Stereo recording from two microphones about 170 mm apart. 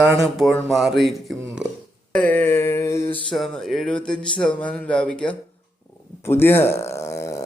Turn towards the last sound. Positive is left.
turn(degrees=15)  # may be behind; listen again after turning